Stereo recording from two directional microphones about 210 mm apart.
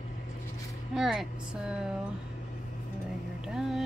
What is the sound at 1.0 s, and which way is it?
Speech, centre (ahead or behind).